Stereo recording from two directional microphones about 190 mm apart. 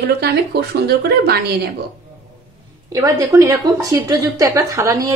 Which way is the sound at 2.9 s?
15° right (ahead or behind).